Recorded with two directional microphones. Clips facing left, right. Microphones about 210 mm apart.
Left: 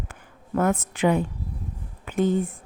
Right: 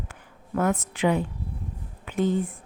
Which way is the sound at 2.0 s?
45° left (ahead or behind).